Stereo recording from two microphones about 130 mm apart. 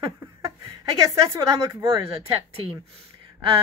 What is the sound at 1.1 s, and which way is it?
Speech, 20° right (ahead or behind).